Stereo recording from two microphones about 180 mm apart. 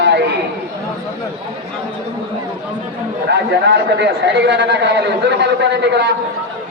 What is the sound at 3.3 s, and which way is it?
A man's voice, 70° right (ahead or behind).